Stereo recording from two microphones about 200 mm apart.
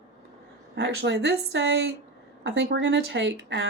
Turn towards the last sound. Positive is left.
turn(degrees=-60)  # may be behind; listen again after turning